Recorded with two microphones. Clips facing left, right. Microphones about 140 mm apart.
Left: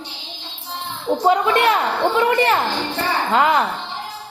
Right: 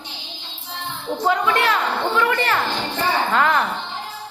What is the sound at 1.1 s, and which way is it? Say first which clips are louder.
A woman's voice: left 4 dB; 25° left (ahead or behind).